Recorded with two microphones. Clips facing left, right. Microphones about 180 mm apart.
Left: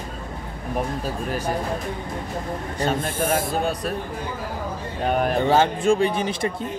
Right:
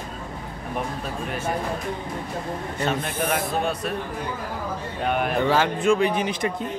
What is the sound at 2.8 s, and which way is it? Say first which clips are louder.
Speech: left 2 dB; 45° left (ahead or behind).